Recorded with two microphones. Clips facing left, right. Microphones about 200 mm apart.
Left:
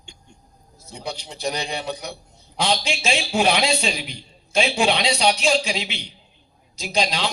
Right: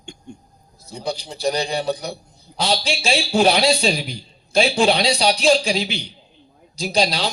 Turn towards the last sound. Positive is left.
turn(degrees=-35)  # may be behind; listen again after turning